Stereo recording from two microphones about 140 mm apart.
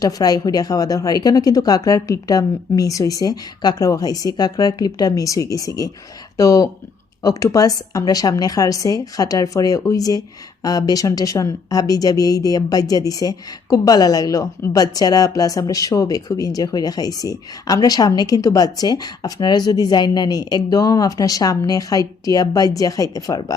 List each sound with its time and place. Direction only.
0.0 s a woman's voice: 25° left (ahead or behind)